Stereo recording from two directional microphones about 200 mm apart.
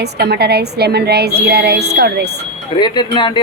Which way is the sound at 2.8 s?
20° left (ahead or behind).